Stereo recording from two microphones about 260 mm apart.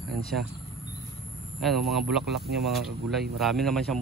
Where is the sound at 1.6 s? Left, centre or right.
Centre.